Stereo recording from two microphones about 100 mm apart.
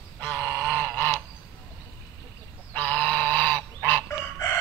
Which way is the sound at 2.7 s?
15° left (ahead or behind).